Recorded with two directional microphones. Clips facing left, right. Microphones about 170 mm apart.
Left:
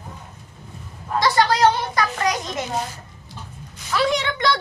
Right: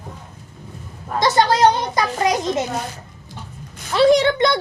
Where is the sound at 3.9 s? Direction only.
35° right (ahead or behind).